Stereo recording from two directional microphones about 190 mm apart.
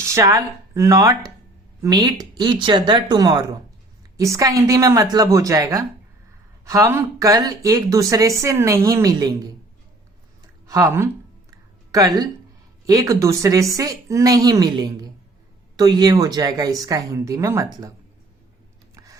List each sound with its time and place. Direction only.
0.0 s speech: 15° right (ahead or behind)
10.7 s speech: 15° right (ahead or behind)
11.5 s a sound: 20° right (ahead or behind)
12.8 s speech: 15° right (ahead or behind)